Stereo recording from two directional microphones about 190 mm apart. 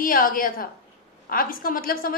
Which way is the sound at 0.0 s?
45° left (ahead or behind).